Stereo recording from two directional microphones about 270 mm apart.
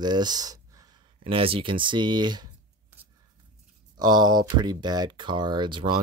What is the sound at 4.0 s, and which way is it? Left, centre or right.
Speech, centre.